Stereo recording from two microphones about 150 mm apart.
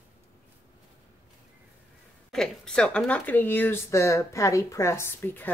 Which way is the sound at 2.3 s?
5° left (ahead or behind).